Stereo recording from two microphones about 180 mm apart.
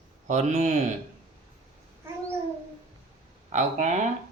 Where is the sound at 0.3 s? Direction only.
40° right (ahead or behind).